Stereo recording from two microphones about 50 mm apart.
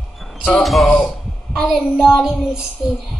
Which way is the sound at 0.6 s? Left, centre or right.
Centre.